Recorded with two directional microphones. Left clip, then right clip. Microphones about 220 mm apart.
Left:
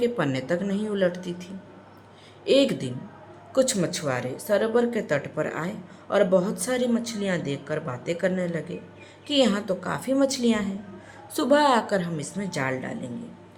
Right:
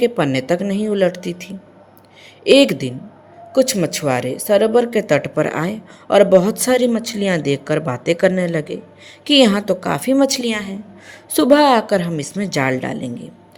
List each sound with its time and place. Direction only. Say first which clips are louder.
0.0 s speech: right 8 dB; 30° right (ahead or behind)